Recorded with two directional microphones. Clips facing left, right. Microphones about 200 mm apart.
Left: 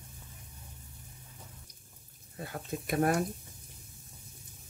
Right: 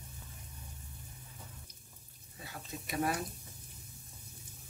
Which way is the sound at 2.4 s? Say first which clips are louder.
Left 8 dB; 55° left (ahead or behind).